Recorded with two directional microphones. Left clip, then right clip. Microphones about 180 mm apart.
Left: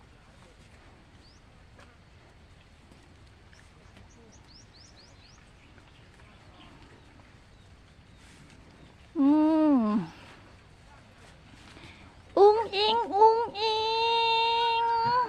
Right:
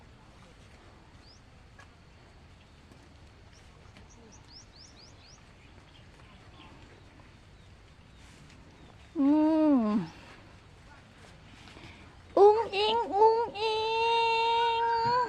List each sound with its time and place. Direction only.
9.1 s humming: 25° left (ahead or behind)
11.8 s babbling: 15° left (ahead or behind)